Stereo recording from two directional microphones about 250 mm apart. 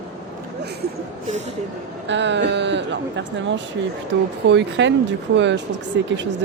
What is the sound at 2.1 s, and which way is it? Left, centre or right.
Speech, right.